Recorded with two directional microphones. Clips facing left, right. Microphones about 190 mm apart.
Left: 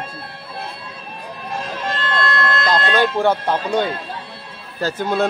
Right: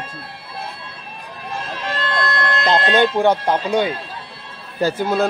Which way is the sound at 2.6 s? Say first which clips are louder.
Right 3 dB; 25° right (ahead or behind).